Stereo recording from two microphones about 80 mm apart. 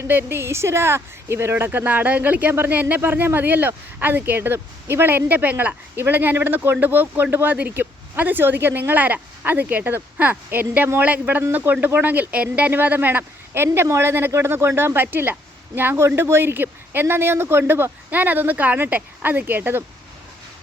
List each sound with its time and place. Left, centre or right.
0.0 s speech: right
13.7 s speech: right